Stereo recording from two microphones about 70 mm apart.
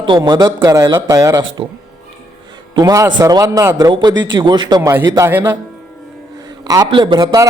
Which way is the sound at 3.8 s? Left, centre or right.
Right.